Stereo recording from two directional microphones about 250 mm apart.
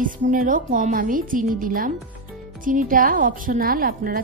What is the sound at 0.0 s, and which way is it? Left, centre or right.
Speech, right.